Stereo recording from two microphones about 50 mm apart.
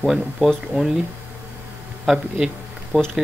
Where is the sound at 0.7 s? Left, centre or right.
Right.